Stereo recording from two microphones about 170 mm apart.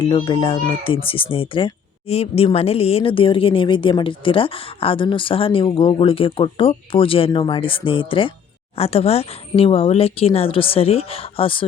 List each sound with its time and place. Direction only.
0.0 s speech: 30° left (ahead or behind)